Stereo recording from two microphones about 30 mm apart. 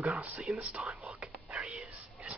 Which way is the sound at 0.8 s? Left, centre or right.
Right.